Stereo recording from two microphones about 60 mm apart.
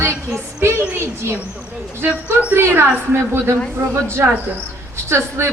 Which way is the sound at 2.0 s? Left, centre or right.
Right.